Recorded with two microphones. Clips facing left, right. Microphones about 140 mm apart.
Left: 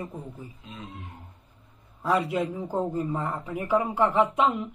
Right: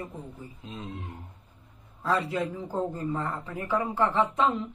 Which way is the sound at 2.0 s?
25° left (ahead or behind).